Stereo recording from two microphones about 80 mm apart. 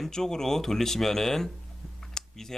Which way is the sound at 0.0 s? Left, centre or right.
Centre.